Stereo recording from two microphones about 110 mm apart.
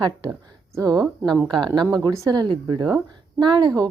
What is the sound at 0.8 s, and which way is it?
A woman's voice, 35° right (ahead or behind).